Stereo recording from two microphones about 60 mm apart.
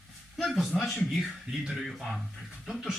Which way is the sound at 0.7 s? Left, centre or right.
Centre.